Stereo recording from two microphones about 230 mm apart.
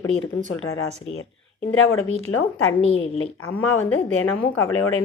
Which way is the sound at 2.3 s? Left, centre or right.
Left.